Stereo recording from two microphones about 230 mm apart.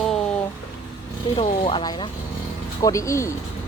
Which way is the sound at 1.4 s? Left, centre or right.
Left.